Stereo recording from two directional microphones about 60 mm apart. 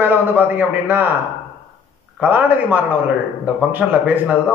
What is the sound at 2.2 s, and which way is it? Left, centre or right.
Speech, right.